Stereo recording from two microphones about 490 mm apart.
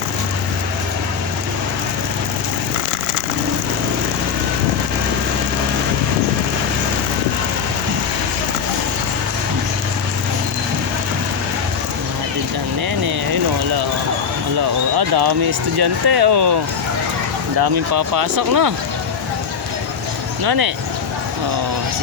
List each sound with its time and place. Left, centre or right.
14.9 s basketball bounce: right
15.8 s speech: right
17.6 s speech: right
20.4 s speech: right